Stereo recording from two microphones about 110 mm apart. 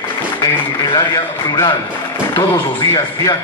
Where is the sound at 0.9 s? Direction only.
35° left (ahead or behind).